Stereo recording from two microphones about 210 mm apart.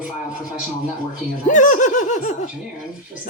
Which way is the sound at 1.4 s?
35° left (ahead or behind).